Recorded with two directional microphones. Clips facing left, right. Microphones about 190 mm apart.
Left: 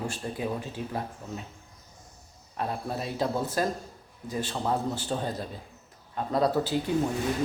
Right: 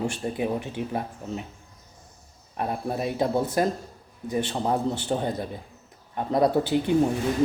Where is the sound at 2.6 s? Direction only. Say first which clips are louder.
Right 4 dB; 15° right (ahead or behind).